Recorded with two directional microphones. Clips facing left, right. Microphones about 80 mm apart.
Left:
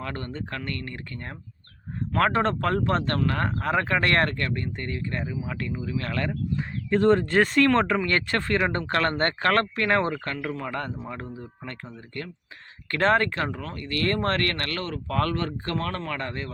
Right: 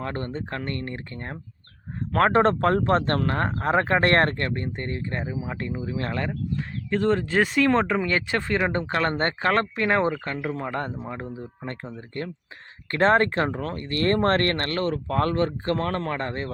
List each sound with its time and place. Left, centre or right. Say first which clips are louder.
0.0 s speech: right 3 dB; right
6.6 s speech: left 3 dB; centre
10.5 s speech: right 2 dB; right